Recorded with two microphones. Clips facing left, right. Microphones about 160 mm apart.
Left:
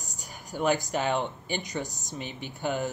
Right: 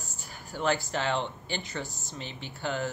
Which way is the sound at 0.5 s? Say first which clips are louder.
Left 2 dB; 15° left (ahead or behind).